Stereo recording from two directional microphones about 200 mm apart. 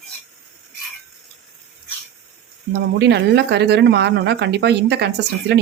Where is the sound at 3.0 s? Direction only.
60° right (ahead or behind).